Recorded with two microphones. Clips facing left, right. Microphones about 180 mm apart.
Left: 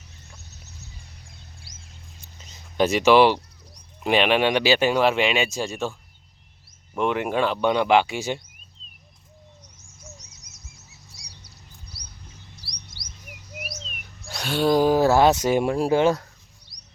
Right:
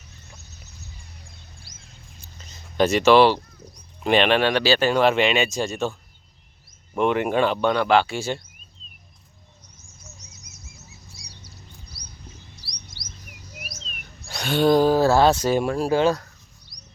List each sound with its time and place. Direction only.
2.4 s speech: 15° left (ahead or behind)
6.9 s speech: centre (ahead or behind)
7.6 s speech: 15° left (ahead or behind)
14.3 s speech: 5° left (ahead or behind); by 16.2 s 20° left (ahead or behind)